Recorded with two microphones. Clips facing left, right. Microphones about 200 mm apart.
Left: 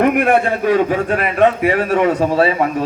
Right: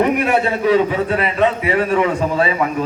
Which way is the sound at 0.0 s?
55° left (ahead or behind).